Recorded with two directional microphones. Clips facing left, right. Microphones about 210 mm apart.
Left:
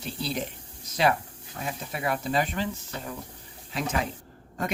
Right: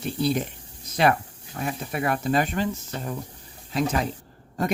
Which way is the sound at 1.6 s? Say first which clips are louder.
Right 4 dB; 55° right (ahead or behind).